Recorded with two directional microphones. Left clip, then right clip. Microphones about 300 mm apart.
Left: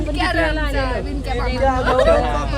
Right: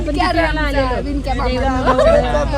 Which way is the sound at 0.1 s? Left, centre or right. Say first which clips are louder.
Right 3 dB; centre.